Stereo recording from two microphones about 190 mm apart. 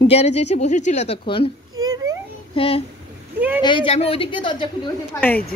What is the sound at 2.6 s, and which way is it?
A woman's voice, 30° left (ahead or behind).